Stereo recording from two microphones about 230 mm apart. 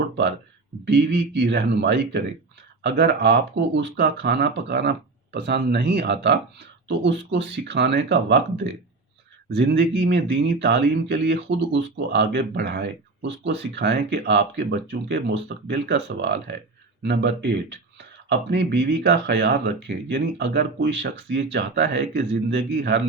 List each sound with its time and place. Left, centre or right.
0.9 s speech: right